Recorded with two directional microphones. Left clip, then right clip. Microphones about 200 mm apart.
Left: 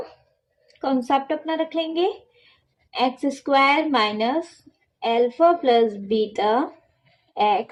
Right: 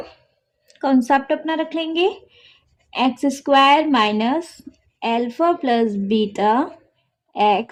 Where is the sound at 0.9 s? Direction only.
45° right (ahead or behind).